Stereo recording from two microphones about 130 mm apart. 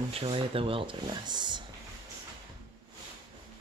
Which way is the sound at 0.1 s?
45° right (ahead or behind).